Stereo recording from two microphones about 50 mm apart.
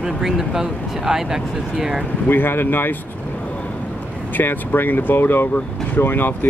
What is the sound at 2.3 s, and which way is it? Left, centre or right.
Speech, left.